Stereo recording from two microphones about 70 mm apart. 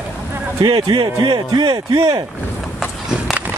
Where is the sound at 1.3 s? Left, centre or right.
Right.